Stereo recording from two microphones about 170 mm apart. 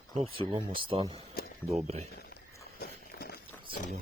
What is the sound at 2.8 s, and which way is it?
Walk, 65° left (ahead or behind).